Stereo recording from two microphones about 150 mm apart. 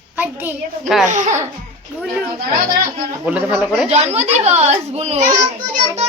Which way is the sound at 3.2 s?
10° right (ahead or behind).